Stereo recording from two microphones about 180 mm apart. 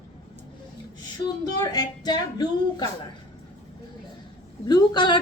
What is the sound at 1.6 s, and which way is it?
Speech, 20° left (ahead or behind).